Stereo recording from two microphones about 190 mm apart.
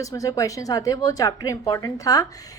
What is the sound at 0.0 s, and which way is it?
A woman's voice, 20° left (ahead or behind).